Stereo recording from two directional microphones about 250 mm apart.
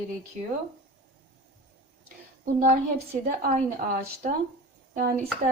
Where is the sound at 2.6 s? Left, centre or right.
Right.